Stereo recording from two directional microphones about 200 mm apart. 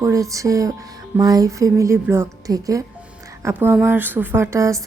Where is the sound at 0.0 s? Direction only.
15° right (ahead or behind).